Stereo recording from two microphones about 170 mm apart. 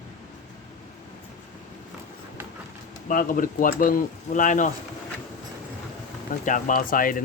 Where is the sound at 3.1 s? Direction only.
50° left (ahead or behind).